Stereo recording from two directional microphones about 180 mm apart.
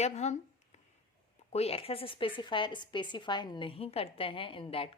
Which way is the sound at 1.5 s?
35° left (ahead or behind).